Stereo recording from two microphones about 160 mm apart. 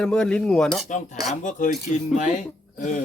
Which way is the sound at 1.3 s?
50° left (ahead or behind).